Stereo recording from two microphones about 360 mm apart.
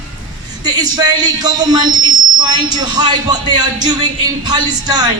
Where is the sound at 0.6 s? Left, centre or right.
Centre.